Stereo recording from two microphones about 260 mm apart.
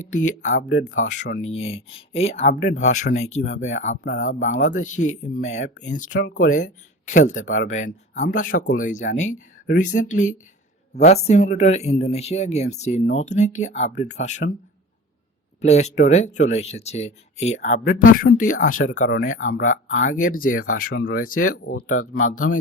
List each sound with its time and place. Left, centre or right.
0.0 s speech: left
0.7 s speech: left
0.9 s speech: left
15.6 s speech: left